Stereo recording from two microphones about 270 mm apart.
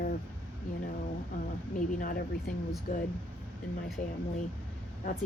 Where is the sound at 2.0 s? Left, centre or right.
Left.